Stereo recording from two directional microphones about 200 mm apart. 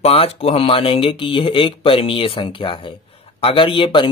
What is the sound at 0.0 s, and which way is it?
Speech, 30° left (ahead or behind).